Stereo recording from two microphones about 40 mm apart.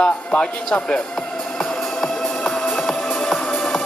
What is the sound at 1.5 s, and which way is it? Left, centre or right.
Music, centre.